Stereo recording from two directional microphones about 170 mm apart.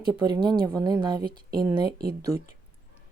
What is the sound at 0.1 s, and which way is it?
A woman's voice, 25° right (ahead or behind).